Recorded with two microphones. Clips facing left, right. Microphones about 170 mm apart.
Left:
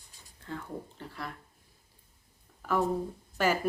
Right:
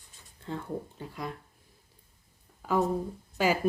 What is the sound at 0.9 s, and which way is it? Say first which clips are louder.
Speech: right 3 dB; 15° right (ahead or behind).